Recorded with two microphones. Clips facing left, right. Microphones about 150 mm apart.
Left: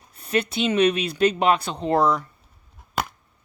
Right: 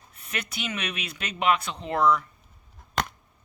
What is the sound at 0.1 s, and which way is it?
Speech, 35° left (ahead or behind).